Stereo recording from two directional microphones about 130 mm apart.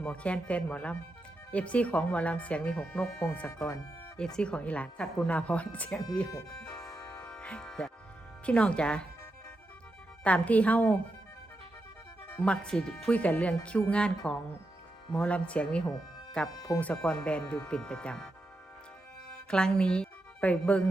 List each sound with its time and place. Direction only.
0.0 s speech: 10° left (ahead or behind)
3.5 s speech: 25° left (ahead or behind)
4.4 s speech: 10° left (ahead or behind)
6.3 s music: 25° left (ahead or behind)
7.3 s music: 5° left (ahead or behind)
8.4 s speech: 10° left (ahead or behind)
10.2 s speech: 10° left (ahead or behind)
12.3 s speech: 10° left (ahead or behind)
15.1 s speech: 10° left (ahead or behind)
19.5 s speech: 5° left (ahead or behind)